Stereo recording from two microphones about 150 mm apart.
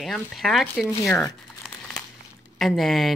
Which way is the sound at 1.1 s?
15° left (ahead or behind).